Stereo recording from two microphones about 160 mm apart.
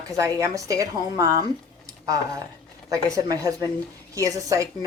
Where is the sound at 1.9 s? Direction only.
20° right (ahead or behind).